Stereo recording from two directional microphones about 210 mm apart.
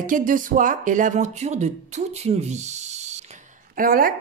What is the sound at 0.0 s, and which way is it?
A woman's voice, 40° right (ahead or behind).